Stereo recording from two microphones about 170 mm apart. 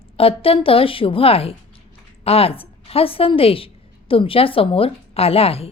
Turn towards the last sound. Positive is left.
turn(degrees=35)  # may be behind; listen again after turning